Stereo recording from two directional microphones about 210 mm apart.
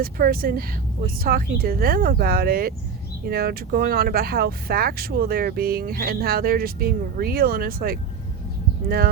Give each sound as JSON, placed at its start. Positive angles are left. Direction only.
{"t": 0.0, "sound": "speech", "side_deg": -45}